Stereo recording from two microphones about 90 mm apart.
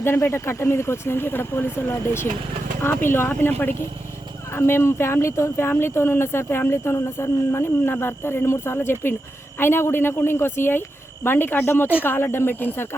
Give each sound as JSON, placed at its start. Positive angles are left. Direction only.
{"t": 0.0, "sound": "speech", "side_deg": 30}